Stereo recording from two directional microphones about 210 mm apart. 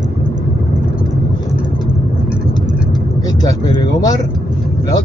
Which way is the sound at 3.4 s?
15° left (ahead or behind).